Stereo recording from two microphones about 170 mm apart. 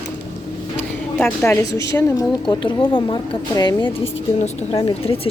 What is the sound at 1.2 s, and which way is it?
A woman's voice, 10° left (ahead or behind).